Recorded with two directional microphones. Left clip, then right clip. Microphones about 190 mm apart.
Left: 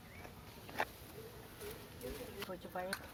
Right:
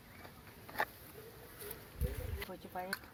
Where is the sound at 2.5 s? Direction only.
35° right (ahead or behind).